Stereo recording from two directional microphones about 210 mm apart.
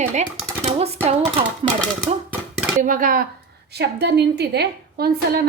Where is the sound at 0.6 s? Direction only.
30° right (ahead or behind).